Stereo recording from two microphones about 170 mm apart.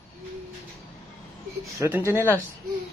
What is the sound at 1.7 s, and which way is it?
Speech, 15° right (ahead or behind).